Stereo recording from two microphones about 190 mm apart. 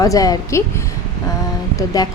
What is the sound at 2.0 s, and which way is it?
Speech, 20° left (ahead or behind).